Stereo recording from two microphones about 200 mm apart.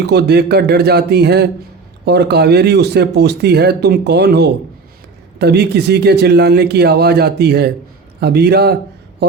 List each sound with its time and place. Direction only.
0.0 s a man's voice: 55° right (ahead or behind)